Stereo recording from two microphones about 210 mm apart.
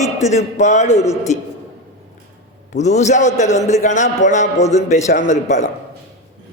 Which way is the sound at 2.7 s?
35° left (ahead or behind).